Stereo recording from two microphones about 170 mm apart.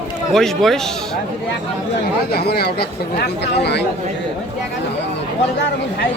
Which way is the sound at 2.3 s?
65° left (ahead or behind).